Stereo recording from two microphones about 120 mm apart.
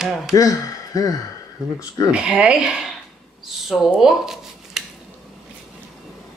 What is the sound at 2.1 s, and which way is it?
Speech, 10° right (ahead or behind).